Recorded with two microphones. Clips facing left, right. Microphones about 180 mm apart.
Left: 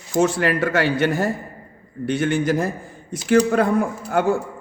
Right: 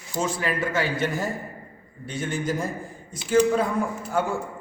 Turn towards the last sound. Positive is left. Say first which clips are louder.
# left 5 dB
turn(degrees=70)  # may be behind; listen again after turning